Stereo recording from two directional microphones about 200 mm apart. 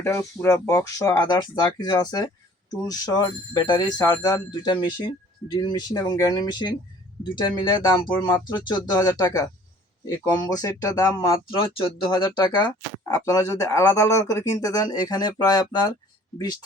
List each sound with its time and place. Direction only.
0.0 s speech: 15° left (ahead or behind)